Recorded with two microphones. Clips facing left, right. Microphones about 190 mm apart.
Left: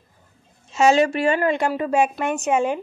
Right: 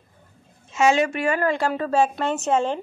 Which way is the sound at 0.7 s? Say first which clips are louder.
Left 3 dB; 35° left (ahead or behind).